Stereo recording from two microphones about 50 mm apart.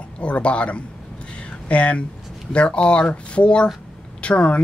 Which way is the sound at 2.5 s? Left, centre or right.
Left.